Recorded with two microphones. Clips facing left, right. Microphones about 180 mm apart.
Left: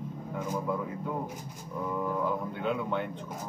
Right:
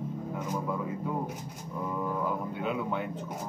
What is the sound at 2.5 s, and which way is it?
Speech, 5° right (ahead or behind).